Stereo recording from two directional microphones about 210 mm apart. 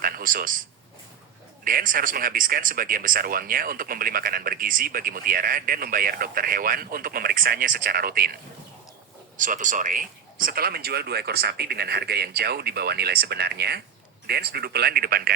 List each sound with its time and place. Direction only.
0.0 s a sound: 40° right (ahead or behind)
1.6 s speech: 40° right (ahead or behind)
9.4 s speech: 40° right (ahead or behind)